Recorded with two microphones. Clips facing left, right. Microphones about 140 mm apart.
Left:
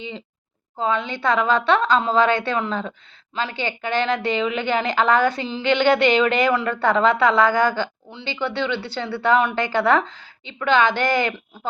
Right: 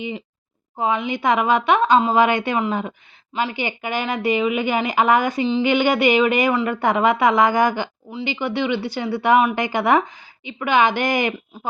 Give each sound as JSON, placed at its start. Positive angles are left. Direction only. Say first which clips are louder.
{"t": 0.8, "sound": "speech", "louder": "right 1 dB", "side_deg": -15}